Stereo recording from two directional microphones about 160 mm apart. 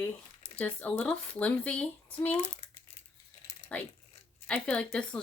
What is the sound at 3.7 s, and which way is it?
A woman's voice, 10° left (ahead or behind).